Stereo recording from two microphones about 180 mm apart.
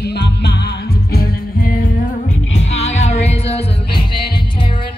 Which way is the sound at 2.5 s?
35° left (ahead or behind).